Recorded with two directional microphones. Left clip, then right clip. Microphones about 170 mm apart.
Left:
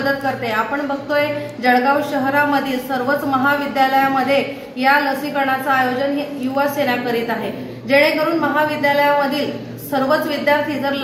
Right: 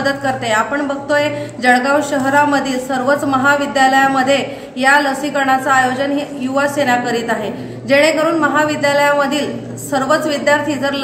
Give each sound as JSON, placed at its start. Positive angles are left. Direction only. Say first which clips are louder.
{"t": 0.0, "sound": "a woman's voice", "louder": "right 2 dB", "side_deg": -15}